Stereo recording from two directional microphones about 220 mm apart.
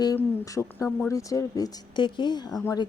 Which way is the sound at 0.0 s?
15° left (ahead or behind).